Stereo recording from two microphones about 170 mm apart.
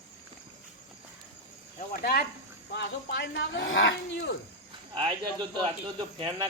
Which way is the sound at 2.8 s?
90° left.